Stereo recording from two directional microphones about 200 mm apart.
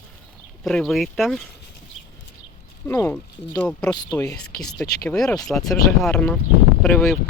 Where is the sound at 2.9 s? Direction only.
10° left (ahead or behind).